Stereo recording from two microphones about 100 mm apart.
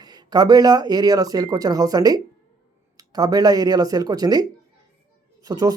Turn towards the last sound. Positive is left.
turn(degrees=-35)  # may be behind; listen again after turning